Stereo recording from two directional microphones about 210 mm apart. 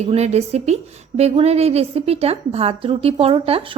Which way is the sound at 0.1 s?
30° right (ahead or behind).